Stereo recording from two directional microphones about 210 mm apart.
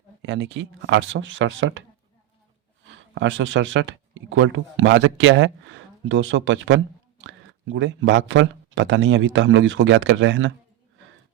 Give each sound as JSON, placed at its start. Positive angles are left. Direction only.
{"t": 0.2, "sound": "speech", "side_deg": -60}
{"t": 2.8, "sound": "speech", "side_deg": -65}